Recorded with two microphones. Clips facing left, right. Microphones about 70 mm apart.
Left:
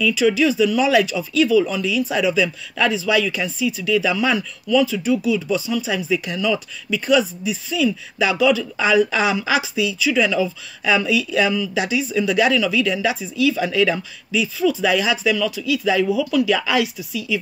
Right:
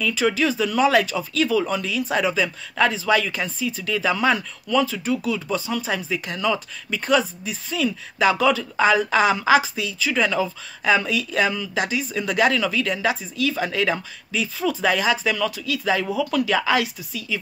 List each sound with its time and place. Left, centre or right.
0.0 s speech: right